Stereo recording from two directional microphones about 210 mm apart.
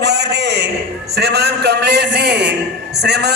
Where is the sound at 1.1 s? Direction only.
50° right (ahead or behind).